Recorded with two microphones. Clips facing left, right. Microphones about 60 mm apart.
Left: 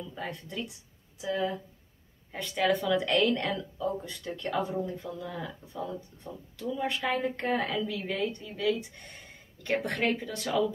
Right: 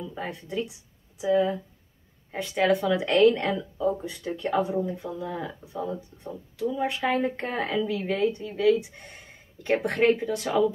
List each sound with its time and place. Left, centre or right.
0.0 s speech: centre